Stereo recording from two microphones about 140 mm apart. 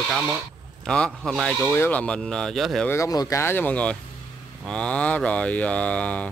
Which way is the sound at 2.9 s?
25° left (ahead or behind).